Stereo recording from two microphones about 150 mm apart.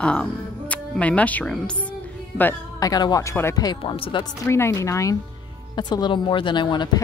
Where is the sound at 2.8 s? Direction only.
25° left (ahead or behind).